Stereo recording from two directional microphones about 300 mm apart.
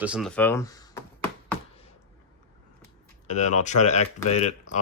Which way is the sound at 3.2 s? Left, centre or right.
Left.